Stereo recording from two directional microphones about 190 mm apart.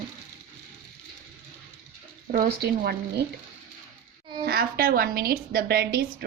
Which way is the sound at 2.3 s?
55° right (ahead or behind).